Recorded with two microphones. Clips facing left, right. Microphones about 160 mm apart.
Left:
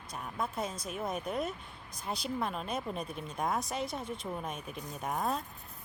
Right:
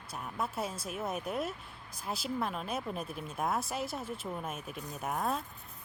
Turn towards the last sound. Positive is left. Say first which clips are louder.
# even
turn(degrees=0)  # may be behind; listen again after turning